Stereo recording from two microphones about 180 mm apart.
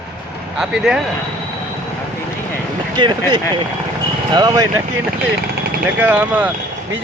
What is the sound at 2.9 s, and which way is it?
Speech, 25° right (ahead or behind).